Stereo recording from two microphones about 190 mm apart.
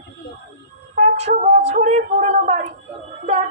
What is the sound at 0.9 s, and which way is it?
Speech, 35° right (ahead or behind).